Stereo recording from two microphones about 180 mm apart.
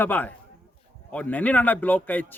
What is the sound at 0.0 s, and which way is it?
A man's voice, 10° left (ahead or behind).